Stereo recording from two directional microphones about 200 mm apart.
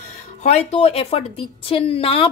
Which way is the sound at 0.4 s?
35° left (ahead or behind).